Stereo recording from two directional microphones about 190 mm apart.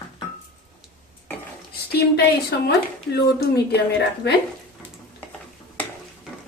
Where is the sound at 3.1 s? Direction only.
60° left (ahead or behind).